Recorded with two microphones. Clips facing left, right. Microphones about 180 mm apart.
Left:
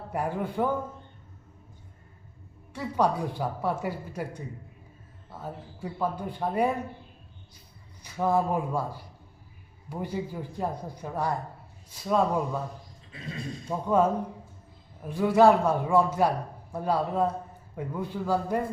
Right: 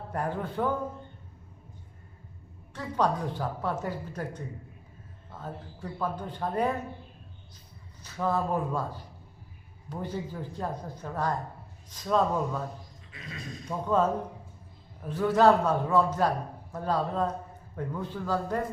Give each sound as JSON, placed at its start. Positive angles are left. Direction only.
{"t": 0.1, "sound": "a woman's voice", "side_deg": 10}
{"t": 2.7, "sound": "a woman's voice", "side_deg": 10}
{"t": 8.0, "sound": "a woman's voice", "side_deg": 15}
{"t": 13.1, "sound": "speech", "side_deg": 30}
{"t": 13.8, "sound": "a woman's voice", "side_deg": 10}